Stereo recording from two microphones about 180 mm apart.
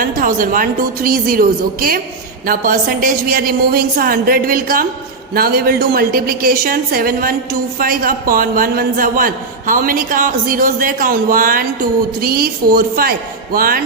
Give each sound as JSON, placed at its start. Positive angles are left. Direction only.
{"t": 0.0, "sound": "a man's voice", "side_deg": -50}